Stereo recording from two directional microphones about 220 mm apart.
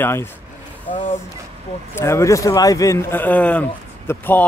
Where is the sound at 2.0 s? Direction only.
10° left (ahead or behind).